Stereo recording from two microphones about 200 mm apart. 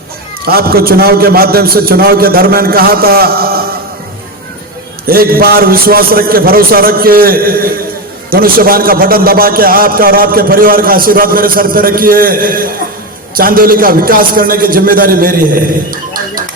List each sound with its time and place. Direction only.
0.4 s a man's voice: 50° right (ahead or behind)
5.0 s a man's voice: 50° right (ahead or behind)